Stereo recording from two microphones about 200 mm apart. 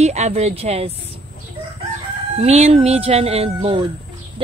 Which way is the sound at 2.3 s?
30° right (ahead or behind).